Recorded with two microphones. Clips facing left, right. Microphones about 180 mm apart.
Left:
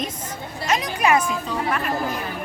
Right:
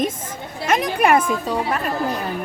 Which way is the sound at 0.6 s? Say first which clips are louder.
Right 3 dB; 55° right (ahead or behind).